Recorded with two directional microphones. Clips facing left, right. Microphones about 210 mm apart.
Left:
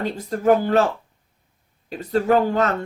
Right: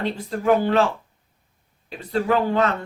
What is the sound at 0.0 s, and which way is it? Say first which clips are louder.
Speech: left 2 dB; 45° left (ahead or behind).